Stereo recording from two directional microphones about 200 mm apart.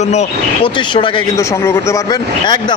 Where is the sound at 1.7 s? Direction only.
20° left (ahead or behind).